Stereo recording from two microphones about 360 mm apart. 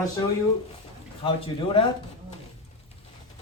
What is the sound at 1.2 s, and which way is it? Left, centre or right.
Speech, centre.